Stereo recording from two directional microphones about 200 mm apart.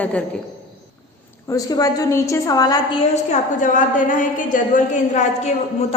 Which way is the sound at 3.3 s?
40° left (ahead or behind).